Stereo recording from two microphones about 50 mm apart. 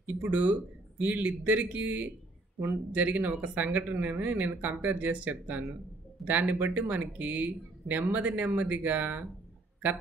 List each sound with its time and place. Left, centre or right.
0.0 s speech: right